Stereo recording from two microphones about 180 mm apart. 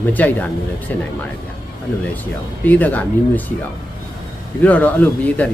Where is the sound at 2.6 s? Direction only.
10° left (ahead or behind).